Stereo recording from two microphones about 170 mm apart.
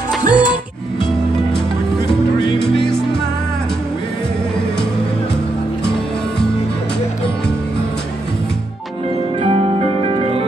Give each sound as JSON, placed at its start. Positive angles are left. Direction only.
{"t": 0.3, "sound": "music", "side_deg": -5}
{"t": 2.8, "sound": "music", "side_deg": 5}
{"t": 9.4, "sound": "music", "side_deg": -40}